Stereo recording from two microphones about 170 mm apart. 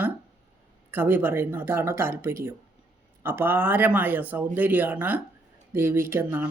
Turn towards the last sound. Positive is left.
turn(degrees=-15)  # may be behind; listen again after turning